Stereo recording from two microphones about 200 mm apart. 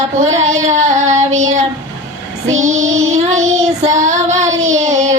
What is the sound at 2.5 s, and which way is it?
Music, 35° right (ahead or behind).